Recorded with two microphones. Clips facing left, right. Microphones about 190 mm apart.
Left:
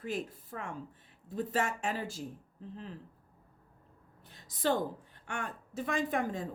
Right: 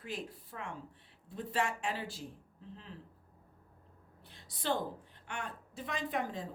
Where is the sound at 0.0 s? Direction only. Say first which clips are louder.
Left 5 dB; 45° left (ahead or behind).